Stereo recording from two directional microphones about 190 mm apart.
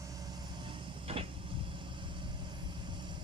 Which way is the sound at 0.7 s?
30° right (ahead or behind).